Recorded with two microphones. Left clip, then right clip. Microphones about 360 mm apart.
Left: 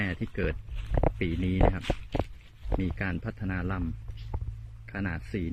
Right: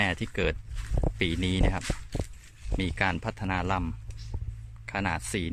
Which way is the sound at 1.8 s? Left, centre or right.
Left.